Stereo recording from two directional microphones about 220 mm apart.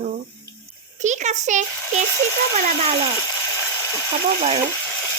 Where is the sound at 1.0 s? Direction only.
35° right (ahead or behind).